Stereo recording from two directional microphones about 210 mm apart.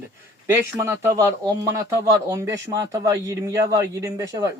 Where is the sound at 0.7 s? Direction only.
10° right (ahead or behind).